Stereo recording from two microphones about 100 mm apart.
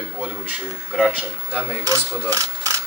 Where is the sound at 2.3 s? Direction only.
35° right (ahead or behind).